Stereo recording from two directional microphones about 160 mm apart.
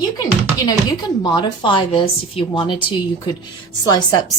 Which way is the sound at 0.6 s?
25° left (ahead or behind).